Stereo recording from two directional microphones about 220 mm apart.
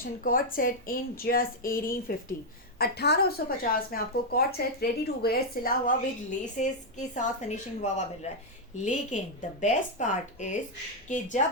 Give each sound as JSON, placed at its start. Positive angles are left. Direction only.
{"t": 0.0, "sound": "a woman's voice", "side_deg": 40}